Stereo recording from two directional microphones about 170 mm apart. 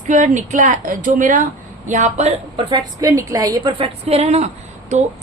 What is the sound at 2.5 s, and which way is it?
A woman's voice, 25° right (ahead or behind).